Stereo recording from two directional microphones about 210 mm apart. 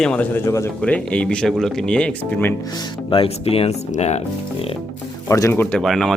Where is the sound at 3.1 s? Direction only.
25° left (ahead or behind).